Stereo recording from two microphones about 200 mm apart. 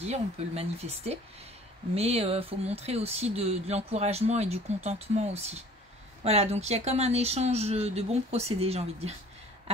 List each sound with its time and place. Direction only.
0.0 s speech: 30° right (ahead or behind)